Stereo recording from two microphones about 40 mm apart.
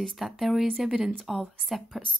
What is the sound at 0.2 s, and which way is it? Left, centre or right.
Speech, centre.